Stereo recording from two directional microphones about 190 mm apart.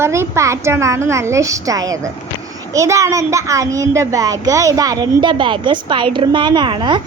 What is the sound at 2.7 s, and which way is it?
A child's voice, 15° right (ahead or behind).